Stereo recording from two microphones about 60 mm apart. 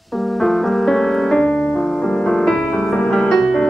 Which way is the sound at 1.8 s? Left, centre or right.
Centre.